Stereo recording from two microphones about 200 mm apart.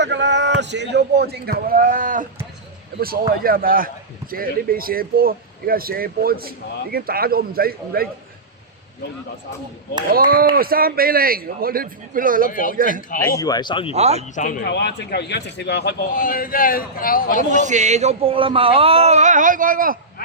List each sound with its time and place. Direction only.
0.0 s a man's voice: 60° right (ahead or behind)
10.5 s a man's voice: 45° right (ahead or behind)
12.5 s a man's voice: 40° left (ahead or behind)
12.7 s a man's voice: 45° right (ahead or behind)
13.3 s speech: 20° left (ahead or behind)
13.9 s speech: 35° right (ahead or behind)
14.3 s speech: 40° left (ahead or behind)
14.7 s a man's voice: 60° left (ahead or behind)
17.5 s speech: 35° right (ahead or behind)